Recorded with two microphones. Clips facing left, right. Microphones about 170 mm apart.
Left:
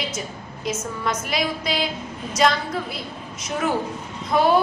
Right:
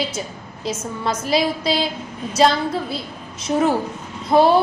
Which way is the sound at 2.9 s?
30° right (ahead or behind).